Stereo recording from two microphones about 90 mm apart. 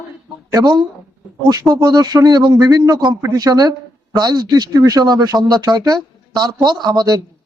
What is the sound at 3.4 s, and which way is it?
Speech, 45° right (ahead or behind).